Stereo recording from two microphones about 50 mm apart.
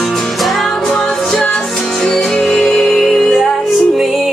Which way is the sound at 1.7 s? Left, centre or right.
Centre.